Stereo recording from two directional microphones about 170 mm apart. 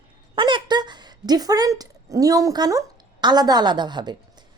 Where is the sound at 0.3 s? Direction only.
30° right (ahead or behind).